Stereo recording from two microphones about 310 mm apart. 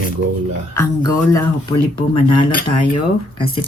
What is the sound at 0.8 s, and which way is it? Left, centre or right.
Speech, centre.